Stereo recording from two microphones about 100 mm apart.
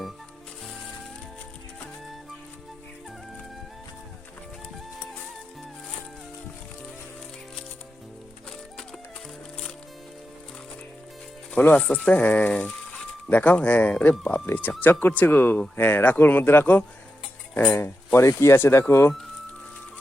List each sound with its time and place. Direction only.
11.5 s speech: 15° left (ahead or behind)
17.7 s speech: 25° left (ahead or behind)